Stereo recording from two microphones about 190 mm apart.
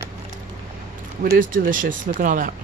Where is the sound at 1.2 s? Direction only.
45° right (ahead or behind).